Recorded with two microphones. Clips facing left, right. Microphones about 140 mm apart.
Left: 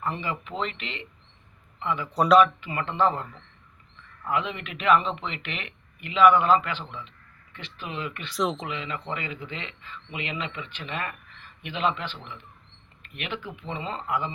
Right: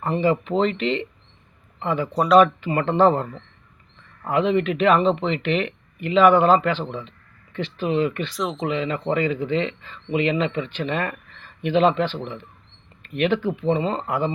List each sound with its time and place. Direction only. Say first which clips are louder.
0.0 s speech: right 10 dB; 30° right (ahead or behind)
2.1 s speech: right 3 dB; centre (ahead or behind)
2.4 s speech: right 5 dB; 35° right (ahead or behind)
8.3 s speech: even; centre (ahead or behind)
8.6 s speech: right 10 dB; 35° right (ahead or behind)